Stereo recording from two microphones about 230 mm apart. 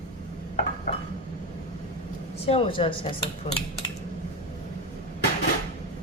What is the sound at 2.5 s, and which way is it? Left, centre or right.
Speech, left.